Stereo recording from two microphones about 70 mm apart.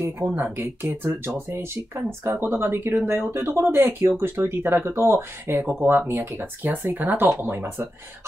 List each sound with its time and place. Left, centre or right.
0.4 s speech: right
2.3 s speech: right